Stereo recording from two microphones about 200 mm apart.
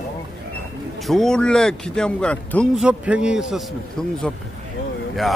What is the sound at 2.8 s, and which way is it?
Speech, 5° right (ahead or behind).